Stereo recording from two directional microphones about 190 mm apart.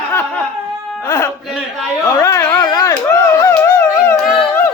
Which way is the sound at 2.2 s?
15° left (ahead or behind).